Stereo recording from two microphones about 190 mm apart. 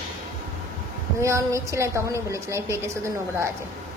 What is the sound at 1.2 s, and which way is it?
A woman's voice, 15° right (ahead or behind).